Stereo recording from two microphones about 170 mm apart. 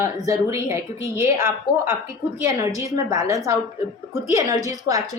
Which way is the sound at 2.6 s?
20° right (ahead or behind).